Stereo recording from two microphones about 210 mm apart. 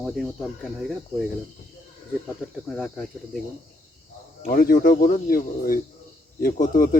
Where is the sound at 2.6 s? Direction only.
Centre (ahead or behind).